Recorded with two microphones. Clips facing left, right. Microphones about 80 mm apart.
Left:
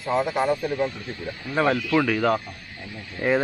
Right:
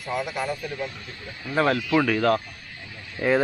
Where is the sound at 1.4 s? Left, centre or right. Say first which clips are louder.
Even; centre.